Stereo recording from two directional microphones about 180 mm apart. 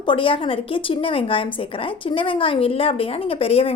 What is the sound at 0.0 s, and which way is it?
A woman's voice, 30° left (ahead or behind).